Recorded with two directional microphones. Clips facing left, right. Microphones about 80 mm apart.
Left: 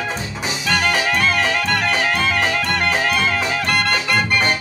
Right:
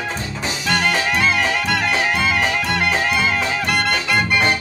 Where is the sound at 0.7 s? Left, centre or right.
Centre.